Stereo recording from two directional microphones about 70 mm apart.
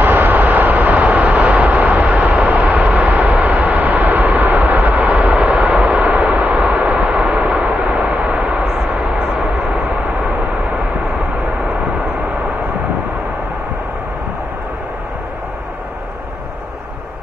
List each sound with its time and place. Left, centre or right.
0.0 s vehicle: right